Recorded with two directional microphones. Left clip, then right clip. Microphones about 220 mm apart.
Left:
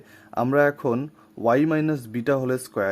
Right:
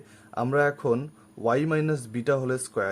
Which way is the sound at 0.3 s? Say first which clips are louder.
Left 4 dB; 30° left (ahead or behind).